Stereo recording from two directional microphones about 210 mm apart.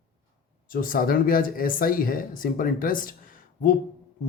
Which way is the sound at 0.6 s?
40° left (ahead or behind).